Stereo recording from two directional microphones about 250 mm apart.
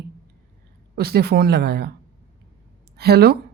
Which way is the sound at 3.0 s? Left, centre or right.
Right.